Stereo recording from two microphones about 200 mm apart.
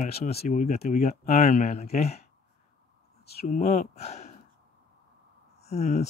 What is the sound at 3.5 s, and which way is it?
Speech, 35° left (ahead or behind).